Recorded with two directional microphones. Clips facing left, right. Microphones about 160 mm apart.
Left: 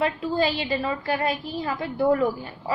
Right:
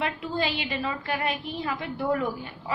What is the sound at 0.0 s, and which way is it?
A woman's voice, 35° left (ahead or behind).